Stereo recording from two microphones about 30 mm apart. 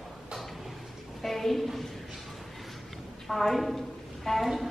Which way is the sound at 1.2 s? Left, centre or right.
Centre.